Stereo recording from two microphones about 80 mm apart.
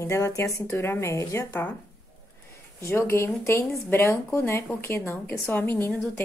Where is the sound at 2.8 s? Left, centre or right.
Left.